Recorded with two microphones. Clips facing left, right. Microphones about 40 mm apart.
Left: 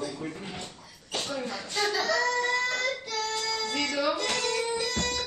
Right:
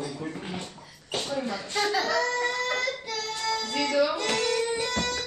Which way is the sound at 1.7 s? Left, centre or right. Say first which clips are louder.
Right 1 dB; right.